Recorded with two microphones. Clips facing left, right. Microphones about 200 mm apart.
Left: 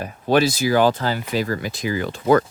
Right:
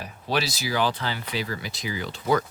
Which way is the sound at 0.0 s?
50° left (ahead or behind).